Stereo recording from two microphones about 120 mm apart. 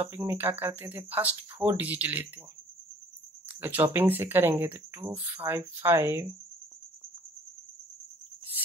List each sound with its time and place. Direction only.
0.0 s speech: 20° right (ahead or behind)
3.6 s speech: 15° right (ahead or behind)